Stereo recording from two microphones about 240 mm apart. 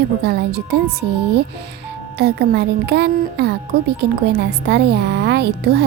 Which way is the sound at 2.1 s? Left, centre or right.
Right.